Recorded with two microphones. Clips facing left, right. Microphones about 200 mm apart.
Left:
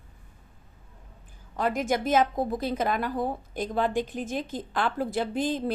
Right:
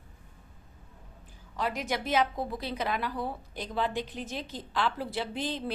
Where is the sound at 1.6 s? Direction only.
50° left (ahead or behind).